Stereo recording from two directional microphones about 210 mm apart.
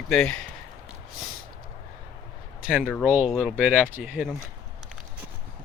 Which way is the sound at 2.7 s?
5° right (ahead or behind).